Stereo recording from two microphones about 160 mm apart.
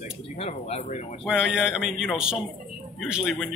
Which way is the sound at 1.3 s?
5° right (ahead or behind).